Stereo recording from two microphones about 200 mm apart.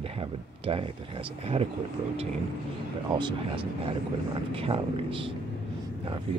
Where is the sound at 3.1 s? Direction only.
25° right (ahead or behind).